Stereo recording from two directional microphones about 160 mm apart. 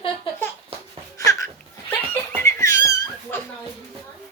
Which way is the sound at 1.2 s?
20° left (ahead or behind).